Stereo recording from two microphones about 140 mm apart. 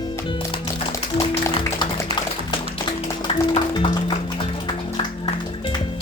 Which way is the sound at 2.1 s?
30° left (ahead or behind).